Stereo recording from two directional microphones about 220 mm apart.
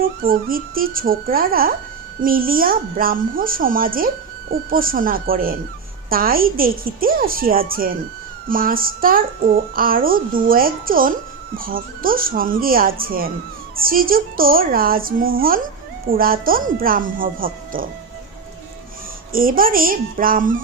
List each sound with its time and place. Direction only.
0.0 s a woman's voice: 40° right (ahead or behind)
19.3 s a woman's voice: 40° right (ahead or behind)